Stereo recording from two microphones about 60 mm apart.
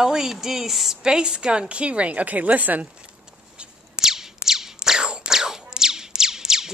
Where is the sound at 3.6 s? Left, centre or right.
Centre.